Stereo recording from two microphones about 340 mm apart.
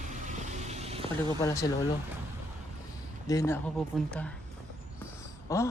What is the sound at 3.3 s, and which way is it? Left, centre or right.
Speech, centre.